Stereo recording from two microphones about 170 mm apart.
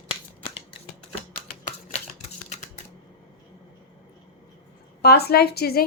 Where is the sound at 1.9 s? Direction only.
40° left (ahead or behind).